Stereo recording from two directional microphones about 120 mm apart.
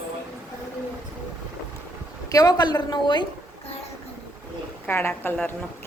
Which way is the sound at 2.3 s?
35° left (ahead or behind).